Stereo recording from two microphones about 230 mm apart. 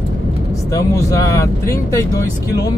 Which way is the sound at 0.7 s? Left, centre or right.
Centre.